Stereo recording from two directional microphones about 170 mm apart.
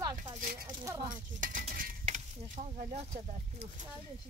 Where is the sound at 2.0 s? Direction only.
40° right (ahead or behind).